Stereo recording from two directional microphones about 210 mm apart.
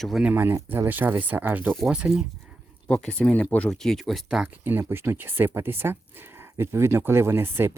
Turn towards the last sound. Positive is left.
turn(degrees=-10)  # may be behind; listen again after turning